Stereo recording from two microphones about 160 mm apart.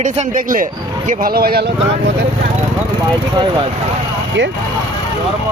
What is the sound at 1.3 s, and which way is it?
Speech, 70° right (ahead or behind).